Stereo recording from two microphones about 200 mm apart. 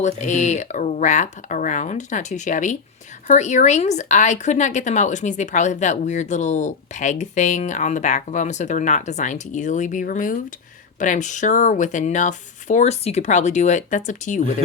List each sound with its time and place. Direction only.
0.0 s speech: 35° left (ahead or behind)